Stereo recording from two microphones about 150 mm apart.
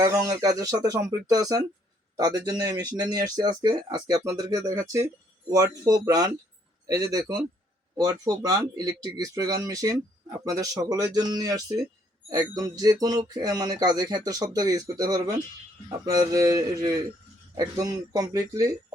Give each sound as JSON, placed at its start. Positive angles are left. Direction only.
{"t": 0.0, "sound": "speech", "side_deg": -20}